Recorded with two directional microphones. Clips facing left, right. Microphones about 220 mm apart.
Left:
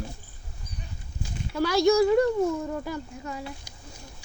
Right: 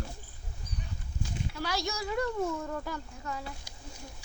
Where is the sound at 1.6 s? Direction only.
55° left (ahead or behind).